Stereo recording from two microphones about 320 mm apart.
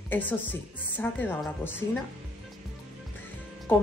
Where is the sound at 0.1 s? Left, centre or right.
Centre.